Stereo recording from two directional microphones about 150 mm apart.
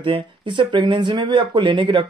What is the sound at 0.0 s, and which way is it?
Speech, 35° right (ahead or behind).